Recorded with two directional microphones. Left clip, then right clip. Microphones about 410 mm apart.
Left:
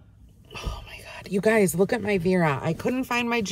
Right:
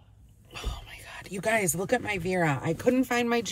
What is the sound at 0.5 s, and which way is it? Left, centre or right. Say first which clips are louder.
Speech: left 3 dB; centre.